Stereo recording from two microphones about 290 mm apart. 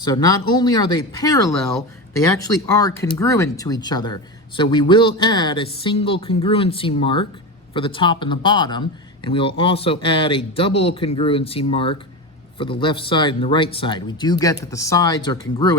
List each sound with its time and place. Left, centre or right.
0.0 s speech: centre